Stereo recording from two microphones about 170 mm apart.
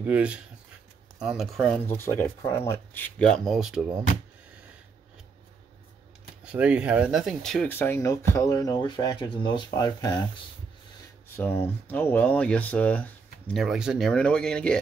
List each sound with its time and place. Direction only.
0.0 s speech: 10° right (ahead or behind)
1.9 s speech: 10° left (ahead or behind); by 3.9 s 5° right (ahead or behind)
6.4 s speech: 5° right (ahead or behind); by 10.2 s 20° left (ahead or behind)
11.3 s speech: 10° left (ahead or behind)